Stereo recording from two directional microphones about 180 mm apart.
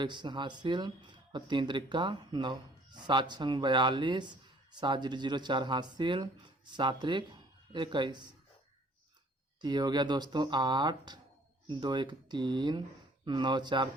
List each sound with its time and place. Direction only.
0.0 s speech: 25° right (ahead or behind)
9.6 s speech: 25° right (ahead or behind)